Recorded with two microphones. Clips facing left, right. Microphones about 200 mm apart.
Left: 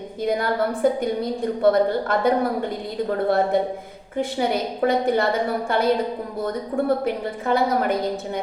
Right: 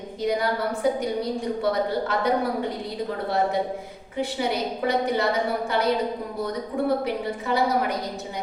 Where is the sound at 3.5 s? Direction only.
55° left (ahead or behind).